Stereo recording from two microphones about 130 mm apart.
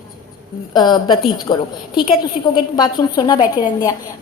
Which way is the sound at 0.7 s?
35° left (ahead or behind).